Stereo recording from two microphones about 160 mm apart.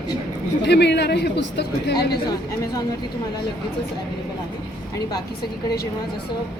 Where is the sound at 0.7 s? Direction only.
90° left.